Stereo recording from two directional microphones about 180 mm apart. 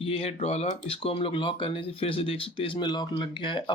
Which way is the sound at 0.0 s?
35° left (ahead or behind).